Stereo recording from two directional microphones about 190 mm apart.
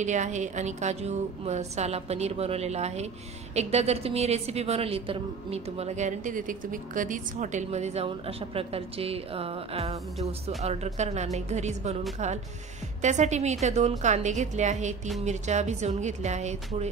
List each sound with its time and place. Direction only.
0.0 s a woman's voice: 40° right (ahead or behind)
13.0 s a woman's voice: 40° right (ahead or behind)